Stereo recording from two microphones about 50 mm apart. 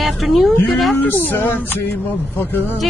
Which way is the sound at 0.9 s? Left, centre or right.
Left.